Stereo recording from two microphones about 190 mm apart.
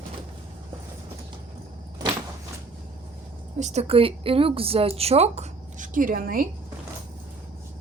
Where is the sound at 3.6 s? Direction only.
35° right (ahead or behind); by 6.4 s 50° right (ahead or behind).